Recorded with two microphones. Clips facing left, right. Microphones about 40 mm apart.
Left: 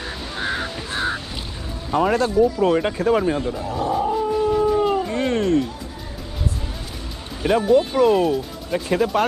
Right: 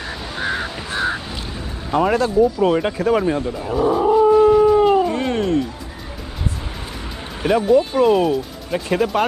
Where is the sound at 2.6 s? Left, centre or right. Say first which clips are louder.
Right 1 dB; right.